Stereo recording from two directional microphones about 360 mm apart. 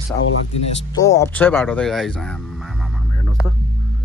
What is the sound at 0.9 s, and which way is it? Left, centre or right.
Speech, centre.